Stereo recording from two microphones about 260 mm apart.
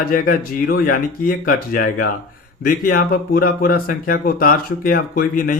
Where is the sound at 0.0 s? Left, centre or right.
Left.